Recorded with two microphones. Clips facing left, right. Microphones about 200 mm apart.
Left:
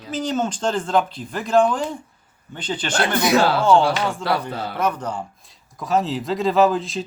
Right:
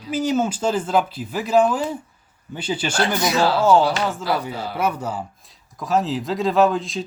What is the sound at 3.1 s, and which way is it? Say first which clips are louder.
Speech: left 3 dB; 60° left (ahead or behind).